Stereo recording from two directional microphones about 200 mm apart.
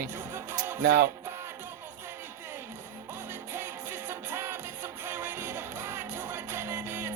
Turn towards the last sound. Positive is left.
turn(degrees=-10)  # may be behind; listen again after turning